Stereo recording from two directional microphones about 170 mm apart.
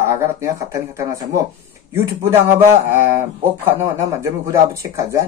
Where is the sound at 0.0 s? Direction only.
15° right (ahead or behind).